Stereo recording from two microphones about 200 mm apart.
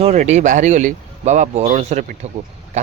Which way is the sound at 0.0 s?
35° right (ahead or behind).